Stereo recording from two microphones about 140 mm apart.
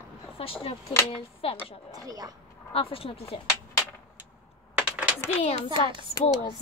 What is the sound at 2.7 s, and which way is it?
Speech, 45° left (ahead or behind).